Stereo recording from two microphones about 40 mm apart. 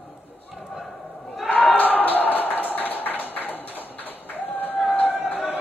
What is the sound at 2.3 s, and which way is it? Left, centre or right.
Music, left.